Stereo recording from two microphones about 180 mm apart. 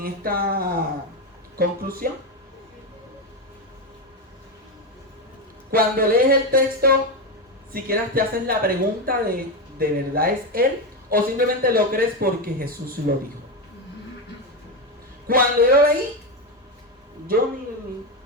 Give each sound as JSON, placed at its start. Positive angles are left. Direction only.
{"t": 0.0, "sound": "speech", "side_deg": -55}
{"t": 5.7, "sound": "a woman's voice", "side_deg": -55}
{"t": 15.3, "sound": "a woman's voice", "side_deg": -55}